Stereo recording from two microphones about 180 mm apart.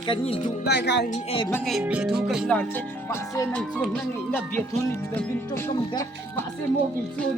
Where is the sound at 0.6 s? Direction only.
65° left (ahead or behind).